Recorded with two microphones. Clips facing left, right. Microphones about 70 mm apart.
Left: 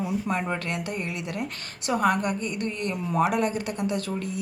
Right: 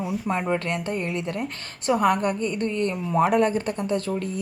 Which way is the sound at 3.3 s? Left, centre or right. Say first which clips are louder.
Right 4 dB; right.